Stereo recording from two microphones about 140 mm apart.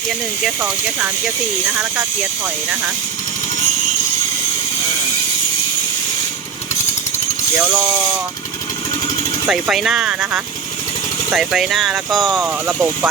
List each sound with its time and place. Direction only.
0.6 s speech: 10° right (ahead or behind)
7.6 s speech: 10° right (ahead or behind)
9.5 s speech: 5° right (ahead or behind)